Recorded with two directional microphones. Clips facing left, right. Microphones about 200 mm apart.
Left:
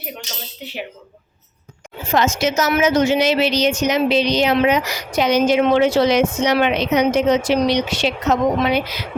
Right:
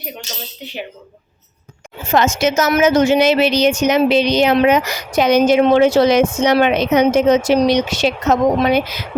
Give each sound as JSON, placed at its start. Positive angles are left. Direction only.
{"t": 0.6, "sound": "speech", "side_deg": 5}
{"t": 2.1, "sound": "a woman's voice", "side_deg": -50}